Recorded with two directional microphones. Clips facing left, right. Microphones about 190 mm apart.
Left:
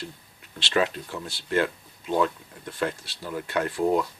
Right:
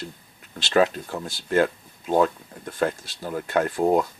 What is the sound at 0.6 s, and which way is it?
Speech, 45° right (ahead or behind).